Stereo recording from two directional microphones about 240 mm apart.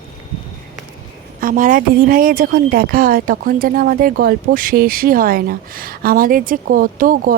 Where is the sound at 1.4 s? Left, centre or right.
Right.